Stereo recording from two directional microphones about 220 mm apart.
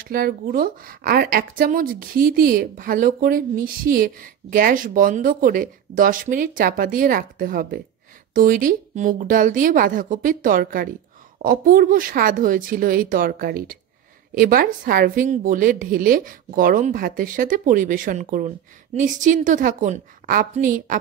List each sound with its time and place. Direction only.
0.0 s a woman's voice: 40° right (ahead or behind)